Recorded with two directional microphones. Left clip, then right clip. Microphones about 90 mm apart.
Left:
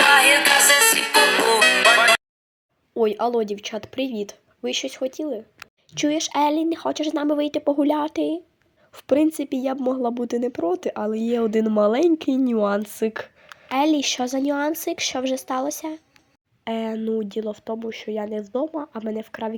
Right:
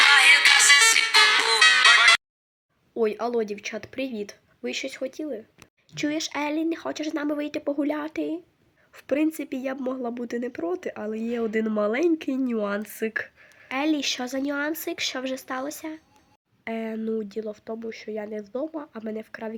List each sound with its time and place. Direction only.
0.0 s music: 10° right (ahead or behind)
2.9 s speech: 25° left (ahead or behind)
17.0 s speech: 20° left (ahead or behind)
19.1 s speech: 25° left (ahead or behind)